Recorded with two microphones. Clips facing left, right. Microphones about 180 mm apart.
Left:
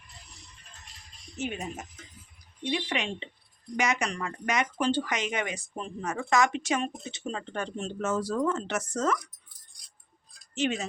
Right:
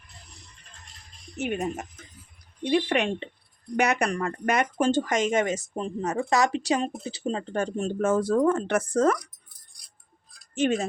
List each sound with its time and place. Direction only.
1.4 s speech: 60° right (ahead or behind)
10.5 s speech: 50° right (ahead or behind)